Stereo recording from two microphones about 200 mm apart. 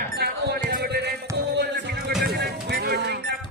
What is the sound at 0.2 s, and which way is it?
Music, 55° right (ahead or behind).